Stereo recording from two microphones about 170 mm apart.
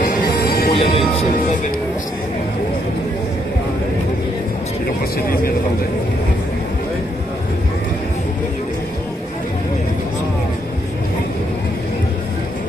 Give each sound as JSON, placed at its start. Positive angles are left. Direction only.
{"t": 0.0, "sound": "music", "side_deg": 60}
{"t": 0.7, "sound": "speech", "side_deg": 35}